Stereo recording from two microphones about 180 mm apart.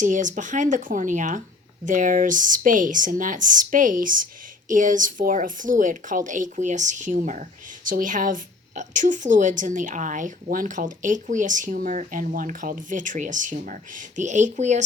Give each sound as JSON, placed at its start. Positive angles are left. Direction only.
{"t": 0.0, "sound": "a woman's voice", "side_deg": -45}